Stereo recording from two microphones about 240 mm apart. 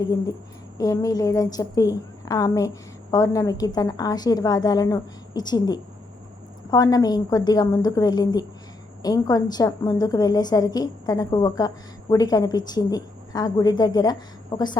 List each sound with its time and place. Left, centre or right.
0.8 s a woman's voice: centre